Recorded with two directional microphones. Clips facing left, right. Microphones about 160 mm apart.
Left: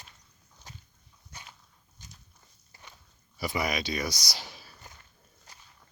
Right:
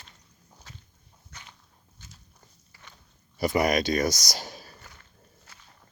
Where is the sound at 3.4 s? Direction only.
45° right (ahead or behind).